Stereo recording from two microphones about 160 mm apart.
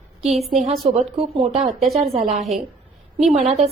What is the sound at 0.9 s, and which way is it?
Speech, 40° right (ahead or behind).